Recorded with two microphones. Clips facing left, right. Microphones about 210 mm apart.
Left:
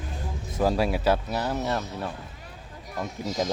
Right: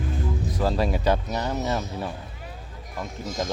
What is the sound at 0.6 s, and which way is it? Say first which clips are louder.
Speech: left 2 dB; 10° left (ahead or behind).